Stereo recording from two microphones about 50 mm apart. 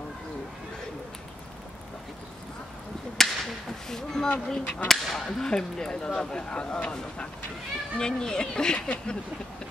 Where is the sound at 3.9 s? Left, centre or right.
Centre.